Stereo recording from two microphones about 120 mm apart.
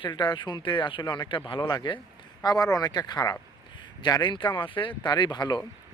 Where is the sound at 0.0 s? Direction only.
40° left (ahead or behind).